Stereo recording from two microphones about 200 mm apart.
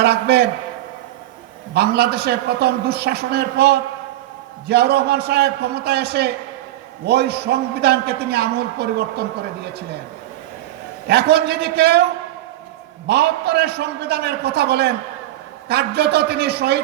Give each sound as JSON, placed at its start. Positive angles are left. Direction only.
{"t": 0.0, "sound": "a man's voice", "side_deg": -55}
{"t": 1.7, "sound": "a man's voice", "side_deg": -55}
{"t": 11.1, "sound": "a man's voice", "side_deg": -55}
{"t": 13.1, "sound": "a man's voice", "side_deg": -55}